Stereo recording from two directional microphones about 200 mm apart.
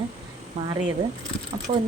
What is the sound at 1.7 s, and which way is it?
Speech, 30° right (ahead or behind).